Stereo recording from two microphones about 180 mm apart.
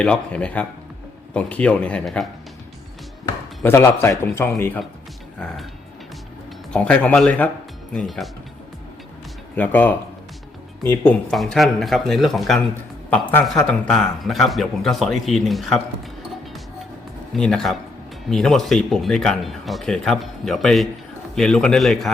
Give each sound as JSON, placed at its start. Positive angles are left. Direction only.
{"t": 0.0, "sound": "a man's voice", "side_deg": 5}
{"t": 3.6, "sound": "a man's voice", "side_deg": 15}
{"t": 6.7, "sound": "a man's voice", "side_deg": 5}
{"t": 9.6, "sound": "a man's voice", "side_deg": 10}
{"t": 17.3, "sound": "speech", "side_deg": 5}